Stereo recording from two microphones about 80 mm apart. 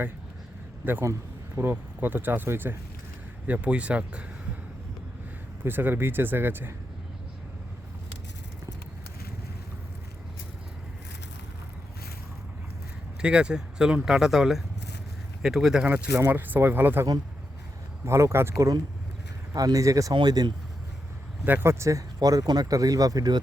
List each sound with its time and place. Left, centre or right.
0.8 s speech: right
5.6 s speech: right
13.2 s speech: centre
16.1 s speech: right
19.5 s speech: right
20.1 s speech: right
21.4 s speech: right